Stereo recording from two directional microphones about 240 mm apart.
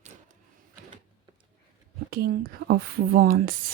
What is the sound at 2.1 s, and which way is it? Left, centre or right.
Speech, right.